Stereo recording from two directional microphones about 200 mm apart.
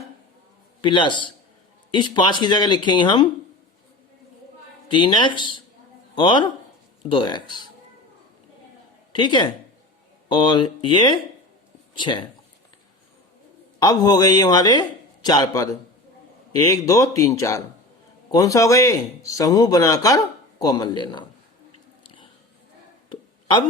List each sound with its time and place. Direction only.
0.8 s a man's voice: 25° left (ahead or behind)
4.9 s a man's voice: 25° left (ahead or behind)
9.1 s a man's voice: 25° left (ahead or behind)
13.7 s a man's voice: 20° left (ahead or behind)
22.0 s biting: 25° left (ahead or behind)